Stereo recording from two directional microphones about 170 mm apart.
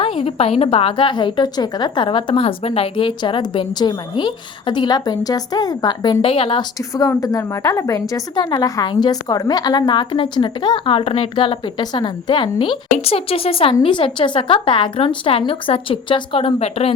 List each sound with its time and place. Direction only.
0.0 s a woman's voice: 35° left (ahead or behind)